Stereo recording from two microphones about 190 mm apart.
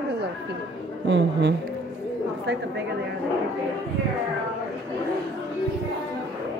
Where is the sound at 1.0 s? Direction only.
70° right (ahead or behind).